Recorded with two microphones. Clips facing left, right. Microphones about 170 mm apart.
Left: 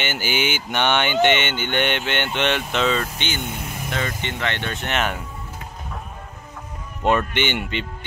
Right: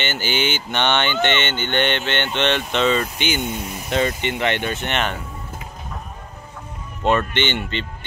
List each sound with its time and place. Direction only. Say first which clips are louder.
0.0 s speech: right 1 dB; 10° left (ahead or behind)
3.2 s speech: right 5 dB; 15° right (ahead or behind)
4.7 s speech: even; centre (ahead or behind)
7.0 s speech: right 1 dB; 10° left (ahead or behind)